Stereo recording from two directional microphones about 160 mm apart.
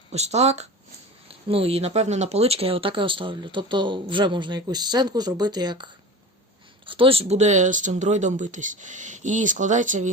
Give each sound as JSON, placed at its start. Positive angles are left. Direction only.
{"t": 0.1, "sound": "speech", "side_deg": -40}